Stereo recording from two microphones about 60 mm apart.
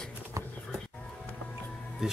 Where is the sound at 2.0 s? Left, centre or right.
Centre.